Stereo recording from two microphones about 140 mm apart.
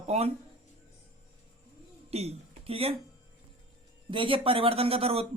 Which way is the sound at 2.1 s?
50° right (ahead or behind).